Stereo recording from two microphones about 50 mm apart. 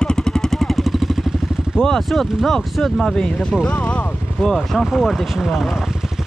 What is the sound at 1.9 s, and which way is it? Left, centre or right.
Speech, centre.